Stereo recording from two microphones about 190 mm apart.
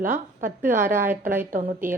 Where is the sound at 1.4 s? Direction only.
45° right (ahead or behind).